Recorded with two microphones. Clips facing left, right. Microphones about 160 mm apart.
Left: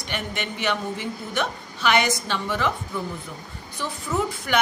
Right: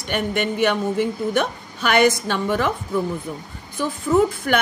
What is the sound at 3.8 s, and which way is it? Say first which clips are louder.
Speech: right 8 dB; 50° right (ahead or behind).